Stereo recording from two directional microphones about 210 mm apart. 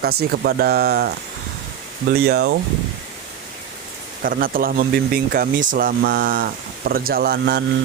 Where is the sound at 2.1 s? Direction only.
50° right (ahead or behind).